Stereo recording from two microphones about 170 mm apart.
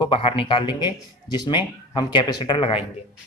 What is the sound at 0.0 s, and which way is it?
Speech, 30° left (ahead or behind).